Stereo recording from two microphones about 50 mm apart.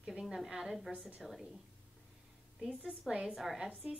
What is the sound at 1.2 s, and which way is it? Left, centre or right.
Speech, centre.